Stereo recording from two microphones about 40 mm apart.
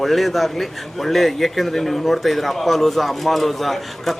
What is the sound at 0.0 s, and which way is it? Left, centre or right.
Speech, centre.